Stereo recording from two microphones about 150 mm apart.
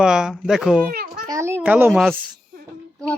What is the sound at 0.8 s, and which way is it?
Children playing, 75° right (ahead or behind).